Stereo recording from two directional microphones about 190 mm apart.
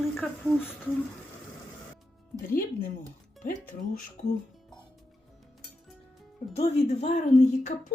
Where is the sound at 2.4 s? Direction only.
45° left (ahead or behind).